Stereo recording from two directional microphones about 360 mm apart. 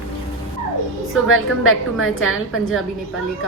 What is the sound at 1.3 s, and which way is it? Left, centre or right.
A woman's voice, left.